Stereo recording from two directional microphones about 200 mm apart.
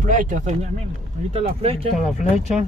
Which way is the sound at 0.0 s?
40° right (ahead or behind).